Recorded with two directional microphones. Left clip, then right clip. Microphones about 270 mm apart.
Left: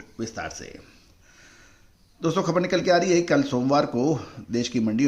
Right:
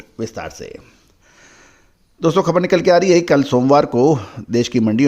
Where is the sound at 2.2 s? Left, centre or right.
Right.